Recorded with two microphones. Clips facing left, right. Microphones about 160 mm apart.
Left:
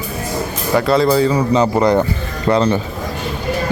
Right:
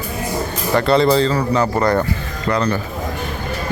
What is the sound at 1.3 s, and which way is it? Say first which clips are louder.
Speech: left 3 dB; 20° left (ahead or behind).